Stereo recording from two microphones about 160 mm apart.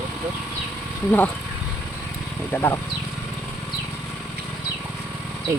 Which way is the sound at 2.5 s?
15° left (ahead or behind).